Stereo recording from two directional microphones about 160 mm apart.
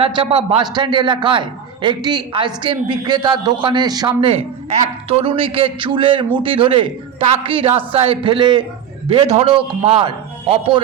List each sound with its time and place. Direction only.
0.0 s a man's voice: 35° right (ahead or behind)